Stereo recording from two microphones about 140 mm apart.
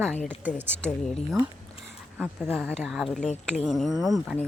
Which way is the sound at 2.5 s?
5° left (ahead or behind).